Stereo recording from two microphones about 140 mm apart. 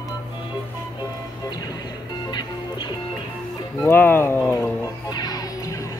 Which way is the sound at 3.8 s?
15° left (ahead or behind).